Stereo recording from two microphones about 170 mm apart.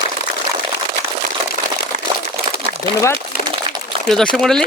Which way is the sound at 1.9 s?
50° right (ahead or behind).